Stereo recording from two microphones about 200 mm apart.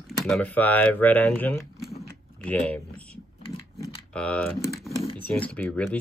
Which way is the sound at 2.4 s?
5° left (ahead or behind).